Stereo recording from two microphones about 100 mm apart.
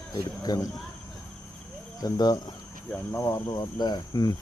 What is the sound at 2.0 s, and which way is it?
Speech, 40° left (ahead or behind).